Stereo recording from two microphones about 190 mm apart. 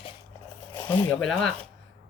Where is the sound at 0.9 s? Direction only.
10° left (ahead or behind).